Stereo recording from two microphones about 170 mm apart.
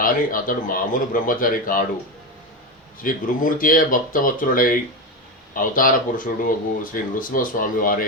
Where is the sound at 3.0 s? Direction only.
55° left (ahead or behind).